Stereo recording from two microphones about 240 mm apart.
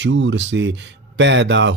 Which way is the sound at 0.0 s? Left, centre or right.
Right.